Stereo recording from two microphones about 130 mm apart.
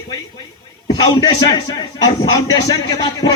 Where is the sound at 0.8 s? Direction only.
35° left (ahead or behind).